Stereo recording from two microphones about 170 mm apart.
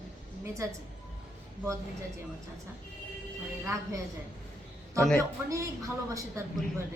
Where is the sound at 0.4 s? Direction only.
15° right (ahead or behind).